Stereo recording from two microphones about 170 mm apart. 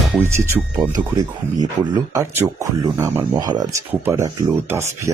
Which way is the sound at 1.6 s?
20° right (ahead or behind).